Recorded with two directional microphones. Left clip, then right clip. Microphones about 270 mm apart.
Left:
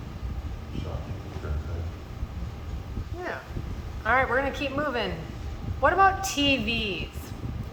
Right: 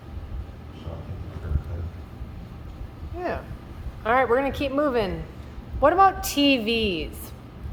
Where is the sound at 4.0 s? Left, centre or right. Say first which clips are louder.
Right 3 dB; right.